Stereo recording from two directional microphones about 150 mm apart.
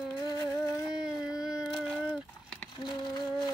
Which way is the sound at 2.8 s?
30° left (ahead or behind).